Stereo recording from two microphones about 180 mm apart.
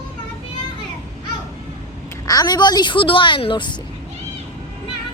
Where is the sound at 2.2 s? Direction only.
20° left (ahead or behind).